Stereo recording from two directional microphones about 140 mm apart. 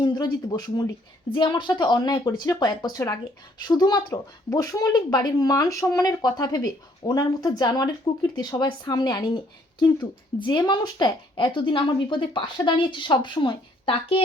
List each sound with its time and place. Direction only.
0.0 s speech: 30° left (ahead or behind)